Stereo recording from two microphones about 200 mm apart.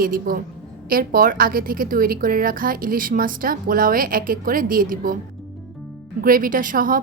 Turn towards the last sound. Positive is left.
turn(degrees=-45)  # may be behind; listen again after turning